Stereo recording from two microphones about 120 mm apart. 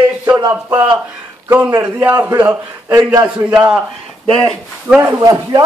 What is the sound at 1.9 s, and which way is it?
Speech, 15° right (ahead or behind).